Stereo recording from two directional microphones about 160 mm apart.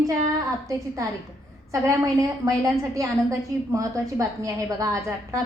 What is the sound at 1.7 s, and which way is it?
A woman's voice, 20° right (ahead or behind).